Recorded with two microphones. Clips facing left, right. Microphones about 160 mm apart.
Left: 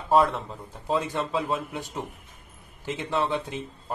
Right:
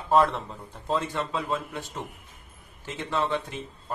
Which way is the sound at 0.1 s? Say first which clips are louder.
Even; centre (ahead or behind).